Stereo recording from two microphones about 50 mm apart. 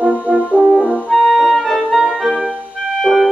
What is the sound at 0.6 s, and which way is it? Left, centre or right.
Brass instrument, centre.